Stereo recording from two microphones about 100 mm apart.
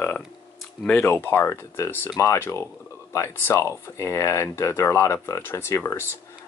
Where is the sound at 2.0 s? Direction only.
35° left (ahead or behind).